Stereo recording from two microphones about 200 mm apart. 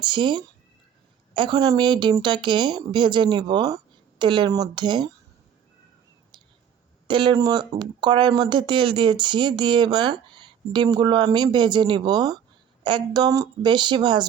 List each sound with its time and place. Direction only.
0.0 s speech: 25° right (ahead or behind)
7.1 s speech: 25° right (ahead or behind)